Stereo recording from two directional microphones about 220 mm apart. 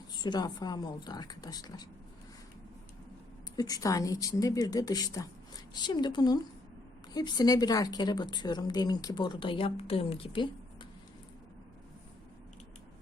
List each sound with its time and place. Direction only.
0.2 s a woman's voice: 20° left (ahead or behind)
3.5 s a woman's voice: 15° left (ahead or behind)